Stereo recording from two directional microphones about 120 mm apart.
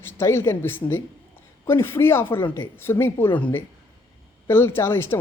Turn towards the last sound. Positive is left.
turn(degrees=20)  # may be behind; listen again after turning